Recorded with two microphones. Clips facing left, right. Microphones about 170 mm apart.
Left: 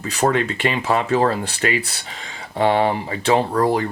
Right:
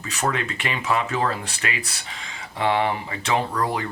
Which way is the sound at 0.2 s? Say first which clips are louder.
Left 7 dB; 35° left (ahead or behind).